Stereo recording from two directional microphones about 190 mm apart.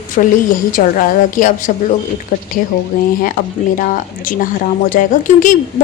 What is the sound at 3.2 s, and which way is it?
A woman's voice, 45° left (ahead or behind).